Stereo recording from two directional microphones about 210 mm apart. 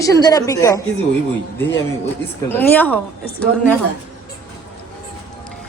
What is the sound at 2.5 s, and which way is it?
Speech, 10° left (ahead or behind).